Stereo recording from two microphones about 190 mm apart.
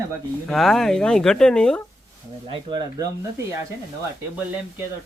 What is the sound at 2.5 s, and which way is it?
Speech, 25° right (ahead or behind).